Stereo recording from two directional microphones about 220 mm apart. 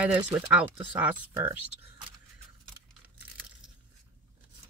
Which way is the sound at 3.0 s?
5° right (ahead or behind).